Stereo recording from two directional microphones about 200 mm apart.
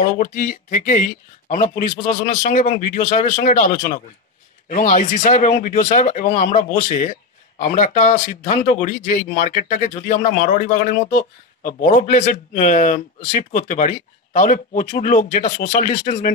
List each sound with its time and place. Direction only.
0.2 s speech: 40° left (ahead or behind)